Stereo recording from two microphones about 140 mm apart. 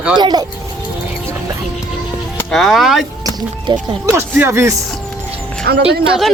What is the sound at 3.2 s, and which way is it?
Speech, 30° right (ahead or behind).